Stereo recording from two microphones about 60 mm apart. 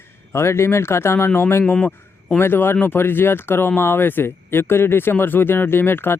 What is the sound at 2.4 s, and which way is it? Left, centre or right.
Speech, left.